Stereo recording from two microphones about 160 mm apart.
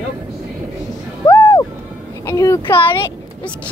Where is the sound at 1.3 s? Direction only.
20° left (ahead or behind).